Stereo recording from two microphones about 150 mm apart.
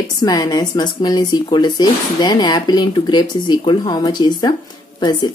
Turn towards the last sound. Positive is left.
turn(degrees=30)  # may be behind; listen again after turning